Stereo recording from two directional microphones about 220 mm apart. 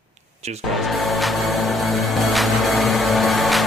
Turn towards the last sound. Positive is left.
turn(degrees=0)  # may be behind; listen again after turning